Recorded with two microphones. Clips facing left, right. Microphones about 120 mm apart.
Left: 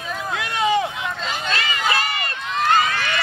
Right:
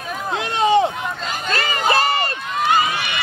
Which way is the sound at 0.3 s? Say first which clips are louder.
Right 4 dB; 25° right (ahead or behind).